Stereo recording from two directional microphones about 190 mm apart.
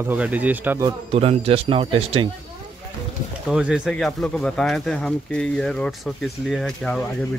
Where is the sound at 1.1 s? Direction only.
30° right (ahead or behind).